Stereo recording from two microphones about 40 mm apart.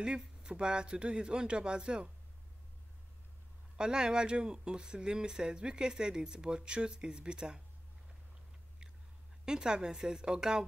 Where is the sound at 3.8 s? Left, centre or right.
Centre.